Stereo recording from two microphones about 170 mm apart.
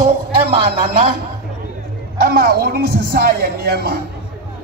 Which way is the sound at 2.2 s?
60° right (ahead or behind).